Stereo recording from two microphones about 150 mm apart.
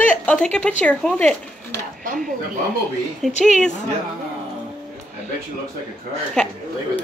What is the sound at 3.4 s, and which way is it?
Speech, centre (ahead or behind).